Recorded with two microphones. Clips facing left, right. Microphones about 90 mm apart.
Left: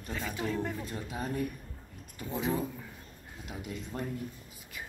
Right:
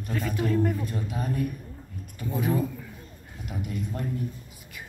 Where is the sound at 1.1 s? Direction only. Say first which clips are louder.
Right 3 dB; 20° left (ahead or behind).